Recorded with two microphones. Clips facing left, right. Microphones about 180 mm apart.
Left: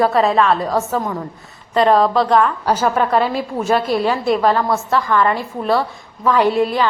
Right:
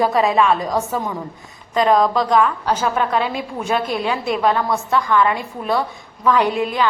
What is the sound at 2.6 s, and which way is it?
A woman's voice, 10° left (ahead or behind).